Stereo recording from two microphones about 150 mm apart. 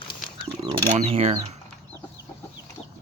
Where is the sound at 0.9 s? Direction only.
40° right (ahead or behind).